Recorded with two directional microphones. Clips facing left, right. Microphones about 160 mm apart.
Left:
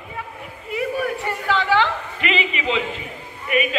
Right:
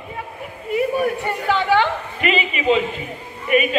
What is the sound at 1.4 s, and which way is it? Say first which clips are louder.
Speech: right 2 dB; 15° right (ahead or behind).